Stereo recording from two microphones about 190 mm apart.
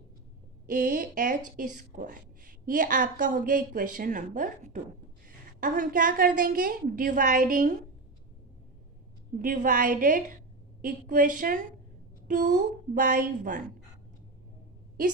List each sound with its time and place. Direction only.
0.7 s a woman's voice: 50° right (ahead or behind)
9.4 s a woman's voice: 45° right (ahead or behind)